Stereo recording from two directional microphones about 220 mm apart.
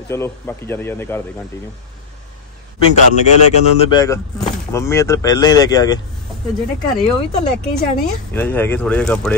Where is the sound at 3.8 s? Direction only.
20° left (ahead or behind).